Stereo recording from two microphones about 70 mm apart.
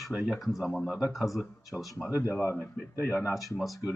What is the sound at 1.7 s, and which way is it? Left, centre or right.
Speech, centre.